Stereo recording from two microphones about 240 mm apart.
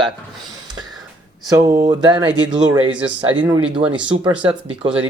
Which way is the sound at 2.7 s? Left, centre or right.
Centre.